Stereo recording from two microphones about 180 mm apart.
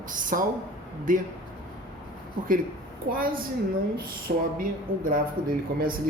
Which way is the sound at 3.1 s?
60° right (ahead or behind).